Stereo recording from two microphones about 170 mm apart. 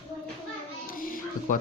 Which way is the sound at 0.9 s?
55° left (ahead or behind).